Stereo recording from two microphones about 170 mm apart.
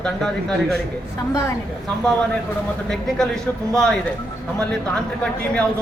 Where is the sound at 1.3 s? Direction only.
15° left (ahead or behind).